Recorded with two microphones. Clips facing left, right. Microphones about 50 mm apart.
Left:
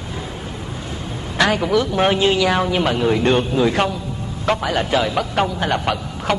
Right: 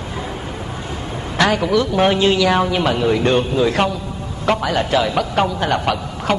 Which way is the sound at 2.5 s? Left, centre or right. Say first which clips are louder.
Right 2 dB; centre.